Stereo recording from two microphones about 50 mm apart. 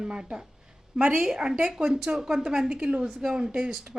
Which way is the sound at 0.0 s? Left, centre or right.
Centre.